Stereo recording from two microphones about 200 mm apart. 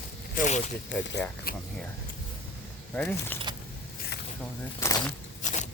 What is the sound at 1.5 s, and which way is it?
Speech, 45° left (ahead or behind).